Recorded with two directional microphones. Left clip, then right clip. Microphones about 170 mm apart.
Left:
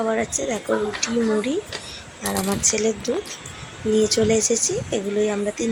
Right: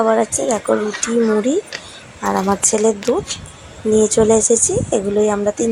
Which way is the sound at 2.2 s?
20° right (ahead or behind).